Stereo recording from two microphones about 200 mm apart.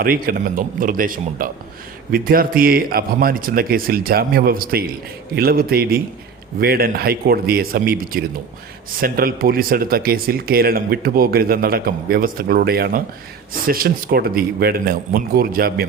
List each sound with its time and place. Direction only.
0.0 s speech: 45° right (ahead or behind)